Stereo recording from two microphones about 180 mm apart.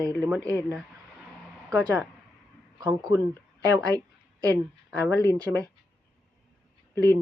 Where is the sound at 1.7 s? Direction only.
10° right (ahead or behind).